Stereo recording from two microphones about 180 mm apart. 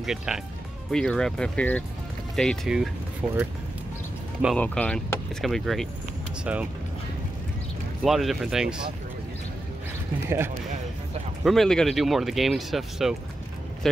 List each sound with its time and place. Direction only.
0.0 s speech: 5° right (ahead or behind)
4.6 s speech: 5° left (ahead or behind)
8.0 s speech: centre (ahead or behind)
11.4 s speech: centre (ahead or behind)